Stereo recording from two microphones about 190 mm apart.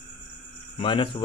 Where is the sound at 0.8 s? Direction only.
30° left (ahead or behind).